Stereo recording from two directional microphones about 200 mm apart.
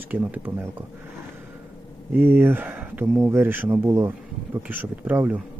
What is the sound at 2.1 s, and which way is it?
Speech, 10° right (ahead or behind).